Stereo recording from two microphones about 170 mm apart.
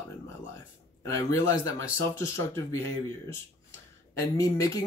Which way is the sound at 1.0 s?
15° left (ahead or behind).